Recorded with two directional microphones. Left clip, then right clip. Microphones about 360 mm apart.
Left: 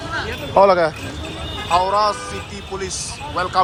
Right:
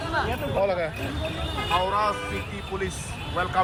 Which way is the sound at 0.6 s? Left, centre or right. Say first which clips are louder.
Left 12 dB; left.